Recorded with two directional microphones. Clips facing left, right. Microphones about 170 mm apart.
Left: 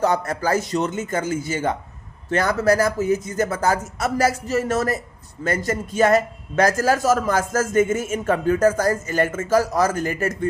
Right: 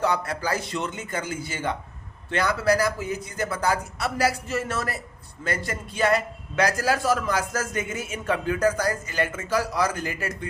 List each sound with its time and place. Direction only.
0.0 s a man's voice: 45° left (ahead or behind)